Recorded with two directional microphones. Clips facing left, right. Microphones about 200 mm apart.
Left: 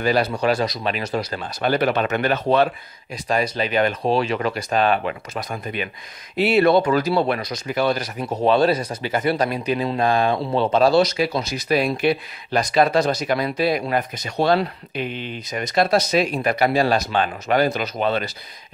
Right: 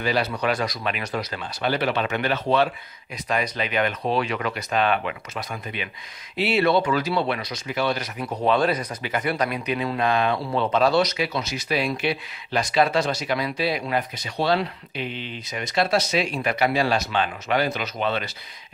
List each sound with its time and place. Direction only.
0.0 s speech: 45° left (ahead or behind)
0.3 s speech: 30° left (ahead or behind); by 2.7 s 45° left (ahead or behind)
3.3 s speech: 35° left (ahead or behind)
8.2 s speech: 25° left (ahead or behind)